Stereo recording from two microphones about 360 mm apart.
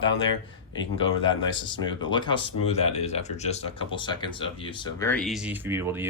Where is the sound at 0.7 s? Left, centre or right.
Centre.